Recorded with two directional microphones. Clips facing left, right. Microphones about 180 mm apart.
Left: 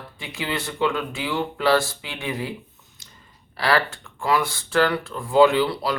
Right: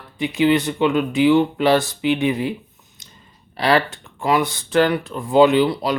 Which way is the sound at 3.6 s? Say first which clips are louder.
Right 4 dB; 20° right (ahead or behind).